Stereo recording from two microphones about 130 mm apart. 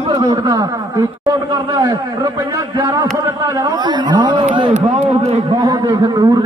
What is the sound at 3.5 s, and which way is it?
Speech, 30° right (ahead or behind).